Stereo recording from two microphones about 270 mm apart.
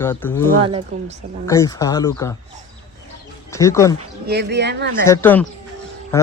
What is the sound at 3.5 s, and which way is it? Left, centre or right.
Speech, centre.